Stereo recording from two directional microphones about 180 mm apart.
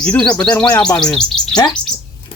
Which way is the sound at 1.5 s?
25° left (ahead or behind).